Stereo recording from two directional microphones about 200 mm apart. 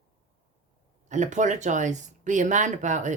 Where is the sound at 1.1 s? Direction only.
35° right (ahead or behind).